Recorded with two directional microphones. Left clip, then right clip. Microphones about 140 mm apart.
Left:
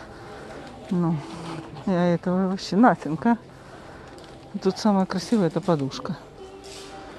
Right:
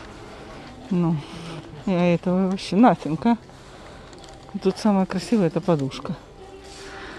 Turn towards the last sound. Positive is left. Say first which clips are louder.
# right 1 dB
turn(degrees=-5)  # may be behind; listen again after turning